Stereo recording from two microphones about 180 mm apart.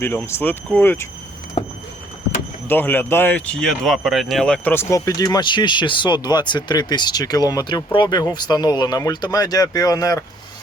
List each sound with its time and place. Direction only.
0.0 s speech: 15° left (ahead or behind)
2.6 s speech: 10° left (ahead or behind)